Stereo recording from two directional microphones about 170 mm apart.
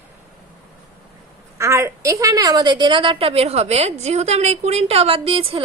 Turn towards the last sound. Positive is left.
turn(degrees=-35)  # may be behind; listen again after turning